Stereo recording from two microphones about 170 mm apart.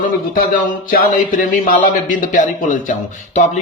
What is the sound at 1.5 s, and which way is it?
Speech, 50° left (ahead or behind).